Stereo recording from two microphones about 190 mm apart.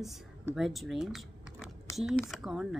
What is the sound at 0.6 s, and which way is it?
Speech, centre (ahead or behind).